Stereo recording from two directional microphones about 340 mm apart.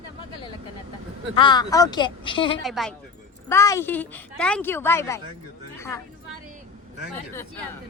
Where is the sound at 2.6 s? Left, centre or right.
Centre.